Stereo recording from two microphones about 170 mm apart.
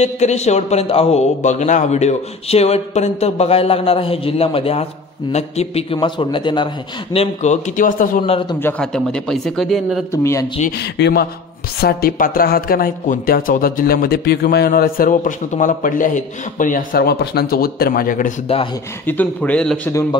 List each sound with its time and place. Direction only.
0.0 s a man's voice: 40° left (ahead or behind)
7.7 s a man's voice: 50° left (ahead or behind)
8.3 s a man's voice: 30° left (ahead or behind)
8.6 s a man's voice: 5° left (ahead or behind)
10.8 s speech: 80° left
11.8 s speech: 60° left (ahead or behind)
19.0 s speech: 10° left (ahead or behind)
19.9 s speech: 20° left (ahead or behind)